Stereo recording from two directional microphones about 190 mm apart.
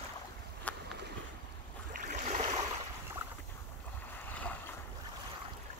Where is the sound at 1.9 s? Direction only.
40° right (ahead or behind).